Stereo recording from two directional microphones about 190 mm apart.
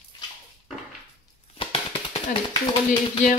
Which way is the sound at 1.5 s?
25° left (ahead or behind).